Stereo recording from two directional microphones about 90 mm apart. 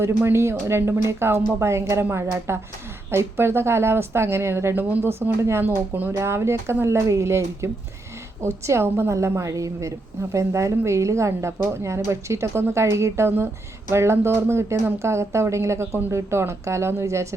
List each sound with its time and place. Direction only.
0.0 s a woman's voice: 30° right (ahead or behind)